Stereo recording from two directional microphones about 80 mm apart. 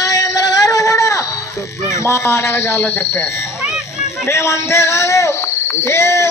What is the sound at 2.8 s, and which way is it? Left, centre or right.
Speech, left.